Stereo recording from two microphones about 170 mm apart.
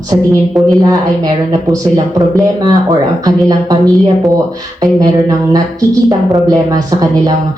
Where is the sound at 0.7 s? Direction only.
20° right (ahead or behind).